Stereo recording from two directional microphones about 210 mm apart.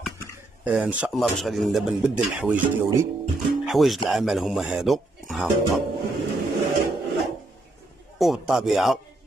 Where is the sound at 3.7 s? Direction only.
Centre (ahead or behind).